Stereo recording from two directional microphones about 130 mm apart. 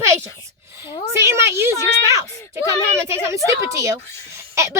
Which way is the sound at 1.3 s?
20° right (ahead or behind).